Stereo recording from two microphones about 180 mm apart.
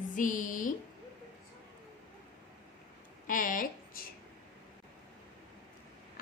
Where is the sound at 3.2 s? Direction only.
50° left (ahead or behind).